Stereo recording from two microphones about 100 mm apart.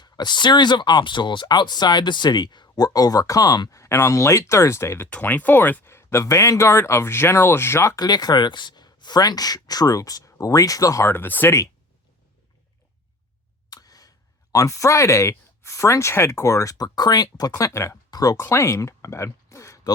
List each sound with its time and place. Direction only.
0.0 s speech: 45° left (ahead or behind); by 5.0 s 25° left (ahead or behind)
5.0 s speech: 15° left (ahead or behind)
7.9 s speech: 40° left (ahead or behind)
11.1 s speech: 20° left (ahead or behind)
13.7 s a sound: 40° left (ahead or behind)
14.5 s speech: 35° left (ahead or behind)